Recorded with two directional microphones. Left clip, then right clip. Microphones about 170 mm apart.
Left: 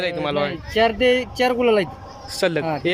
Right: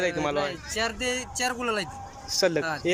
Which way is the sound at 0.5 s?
40° left (ahead or behind).